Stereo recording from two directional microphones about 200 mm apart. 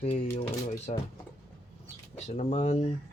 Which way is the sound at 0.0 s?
30° left (ahead or behind).